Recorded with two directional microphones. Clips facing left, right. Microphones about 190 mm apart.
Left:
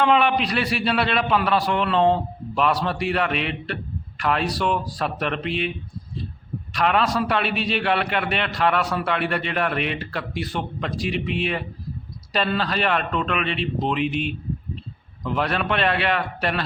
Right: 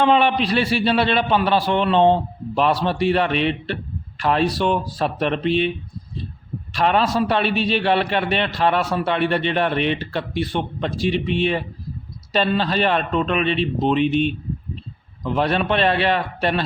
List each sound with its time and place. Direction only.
0.0 s a man's voice: 25° right (ahead or behind)
6.7 s a man's voice: 30° right (ahead or behind)
15.2 s a man's voice: 25° right (ahead or behind)